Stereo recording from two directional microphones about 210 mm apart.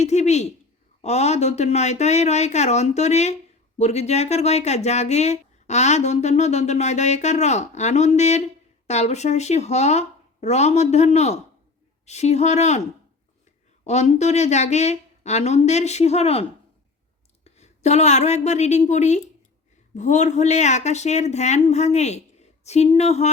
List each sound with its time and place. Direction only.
0.0 s speech: 35° left (ahead or behind)
13.8 s speech: 35° left (ahead or behind)